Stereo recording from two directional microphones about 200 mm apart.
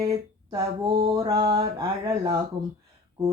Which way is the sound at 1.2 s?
20° right (ahead or behind).